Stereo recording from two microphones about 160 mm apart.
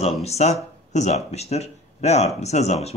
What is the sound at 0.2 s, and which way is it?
Speech, 40° left (ahead or behind).